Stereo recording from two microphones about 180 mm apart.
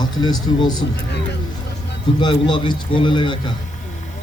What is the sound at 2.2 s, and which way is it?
A man's voice, 25° left (ahead or behind).